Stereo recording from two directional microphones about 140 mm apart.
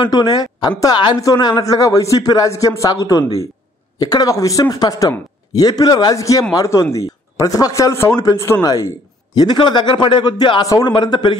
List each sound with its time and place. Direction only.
0.0 s a woman's voice: 30° left (ahead or behind)